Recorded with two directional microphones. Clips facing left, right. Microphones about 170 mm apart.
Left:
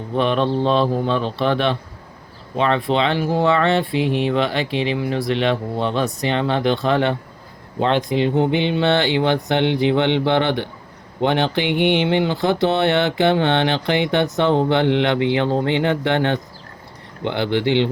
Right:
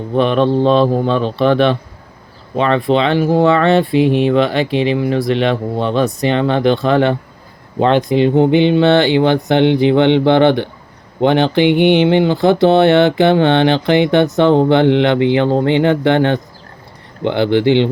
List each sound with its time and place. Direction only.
0.2 s speech: 60° right (ahead or behind)